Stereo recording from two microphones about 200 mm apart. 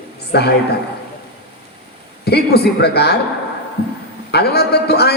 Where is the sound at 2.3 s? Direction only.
55° left (ahead or behind).